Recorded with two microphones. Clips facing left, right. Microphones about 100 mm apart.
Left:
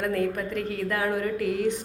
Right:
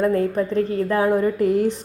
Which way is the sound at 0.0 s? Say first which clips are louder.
Right 7 dB; 30° right (ahead or behind).